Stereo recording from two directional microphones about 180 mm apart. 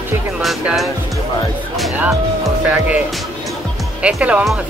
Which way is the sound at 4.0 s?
5° right (ahead or behind).